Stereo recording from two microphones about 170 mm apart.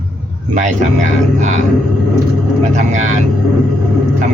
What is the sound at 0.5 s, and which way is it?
Speech, 45° right (ahead or behind).